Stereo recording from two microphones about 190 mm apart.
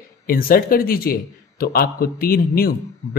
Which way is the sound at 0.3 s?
50° left (ahead or behind).